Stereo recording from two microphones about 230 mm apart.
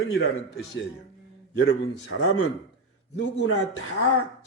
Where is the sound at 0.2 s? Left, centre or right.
Left.